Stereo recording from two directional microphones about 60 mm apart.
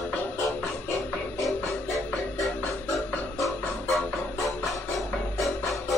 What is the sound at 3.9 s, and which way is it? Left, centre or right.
Music, centre.